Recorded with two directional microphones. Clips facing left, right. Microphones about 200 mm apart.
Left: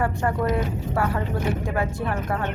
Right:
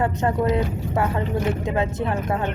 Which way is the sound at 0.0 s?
20° right (ahead or behind).